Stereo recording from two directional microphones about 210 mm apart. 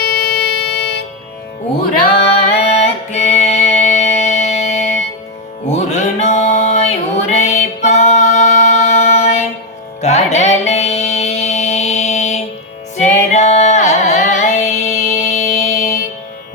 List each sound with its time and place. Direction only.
0.0 s music: 50° left (ahead or behind)
2.5 s music: 30° left (ahead or behind)
13.0 s carnatic music: 35° left (ahead or behind)